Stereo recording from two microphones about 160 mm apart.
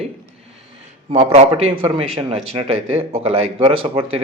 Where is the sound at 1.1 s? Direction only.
40° right (ahead or behind).